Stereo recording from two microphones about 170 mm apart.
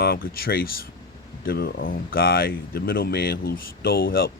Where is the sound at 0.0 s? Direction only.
65° left (ahead or behind).